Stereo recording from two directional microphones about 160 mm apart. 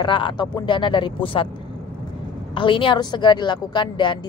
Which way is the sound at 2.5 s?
30° left (ahead or behind).